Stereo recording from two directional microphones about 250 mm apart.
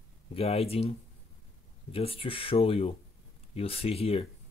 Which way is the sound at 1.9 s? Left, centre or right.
Left.